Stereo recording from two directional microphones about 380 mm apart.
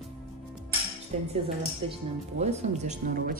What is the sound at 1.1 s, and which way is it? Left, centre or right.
Dishes, centre.